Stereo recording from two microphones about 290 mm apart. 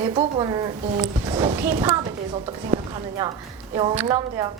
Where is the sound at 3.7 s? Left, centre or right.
Centre.